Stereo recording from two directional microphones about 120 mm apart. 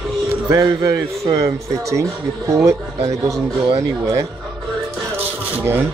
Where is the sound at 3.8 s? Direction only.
25° right (ahead or behind).